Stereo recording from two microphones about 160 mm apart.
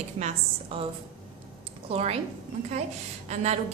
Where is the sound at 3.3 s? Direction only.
45° right (ahead or behind).